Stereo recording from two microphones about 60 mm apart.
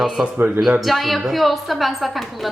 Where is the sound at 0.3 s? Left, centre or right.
Right.